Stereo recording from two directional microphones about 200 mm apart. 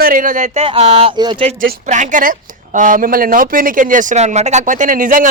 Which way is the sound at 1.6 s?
40° right (ahead or behind).